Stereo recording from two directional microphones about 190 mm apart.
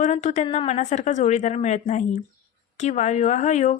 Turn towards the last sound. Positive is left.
turn(degrees=35)  # may be behind; listen again after turning